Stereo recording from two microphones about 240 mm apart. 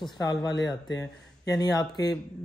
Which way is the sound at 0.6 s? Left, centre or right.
Centre.